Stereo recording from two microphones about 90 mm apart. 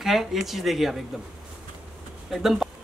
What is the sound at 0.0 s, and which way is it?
Speech, 5° right (ahead or behind).